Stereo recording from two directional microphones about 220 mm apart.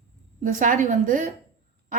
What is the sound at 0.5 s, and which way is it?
Speech, 35° right (ahead or behind).